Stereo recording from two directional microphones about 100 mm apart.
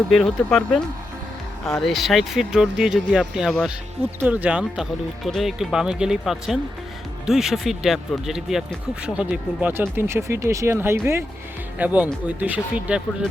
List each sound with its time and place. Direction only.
0.1 s speech: 5° left (ahead or behind)
4.2 s speech: 15° right (ahead or behind)
5.2 s speech: centre (ahead or behind); by 11.2 s 25° right (ahead or behind)
11.8 s speech: 15° right (ahead or behind)